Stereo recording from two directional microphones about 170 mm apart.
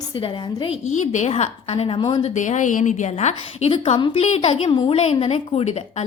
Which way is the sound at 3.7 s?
30° left (ahead or behind).